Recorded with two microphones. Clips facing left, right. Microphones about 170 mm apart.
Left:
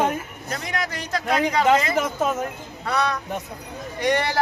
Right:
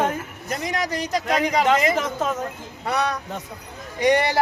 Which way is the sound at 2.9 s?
15° right (ahead or behind).